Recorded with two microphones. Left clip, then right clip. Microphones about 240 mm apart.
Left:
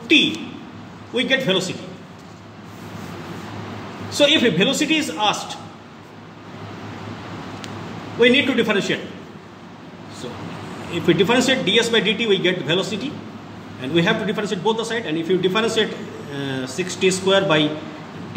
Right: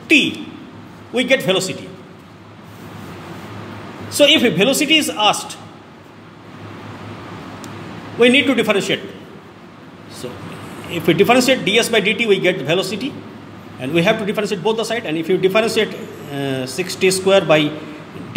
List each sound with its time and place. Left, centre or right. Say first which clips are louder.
1.1 s a man's voice: right 3 dB; right
4.1 s a man's voice: right 4 dB; right
8.2 s a man's voice: right 3 dB; right
11.1 s a man's voice: right 4 dB; right